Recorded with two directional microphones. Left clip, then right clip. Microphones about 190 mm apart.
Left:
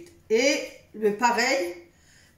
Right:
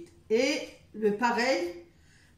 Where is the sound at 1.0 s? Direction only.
20° left (ahead or behind).